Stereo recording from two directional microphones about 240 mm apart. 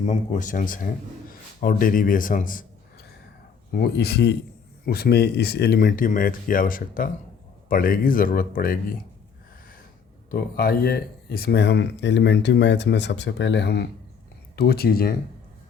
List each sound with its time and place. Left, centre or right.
0.0 s speech: left
3.7 s speech: left
10.3 s speech: left